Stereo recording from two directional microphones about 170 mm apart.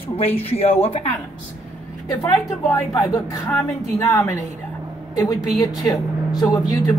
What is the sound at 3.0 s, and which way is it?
Speech, 20° left (ahead or behind).